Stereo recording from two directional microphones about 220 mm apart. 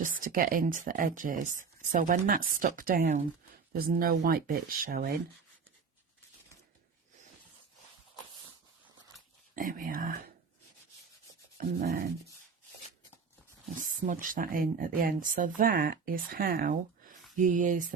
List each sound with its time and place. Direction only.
0.0 s speech: 40° right (ahead or behind)
9.6 s speech: 40° right (ahead or behind)
11.5 s speech: 40° right (ahead or behind)
14.0 s speech: 35° right (ahead or behind)